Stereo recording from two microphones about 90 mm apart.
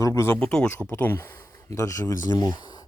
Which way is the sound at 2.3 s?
50° left (ahead or behind).